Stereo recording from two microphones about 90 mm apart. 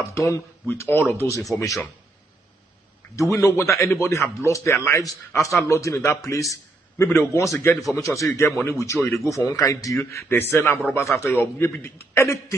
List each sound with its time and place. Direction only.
0.1 s a man's voice: 35° left (ahead or behind)
0.7 s a man's voice: 25° left (ahead or behind)
1.5 s a man's voice: 35° left (ahead or behind)
3.2 s a man's voice: 35° left (ahead or behind)
7.9 s a man's voice: 35° left (ahead or behind)
9.9 s a man's voice: 25° left (ahead or behind)